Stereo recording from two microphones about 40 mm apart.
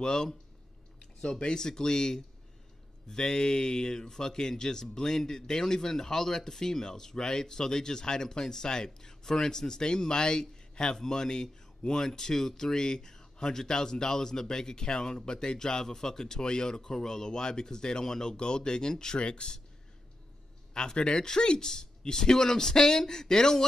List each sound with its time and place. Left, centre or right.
0.0 s speech: centre
20.7 s speech: centre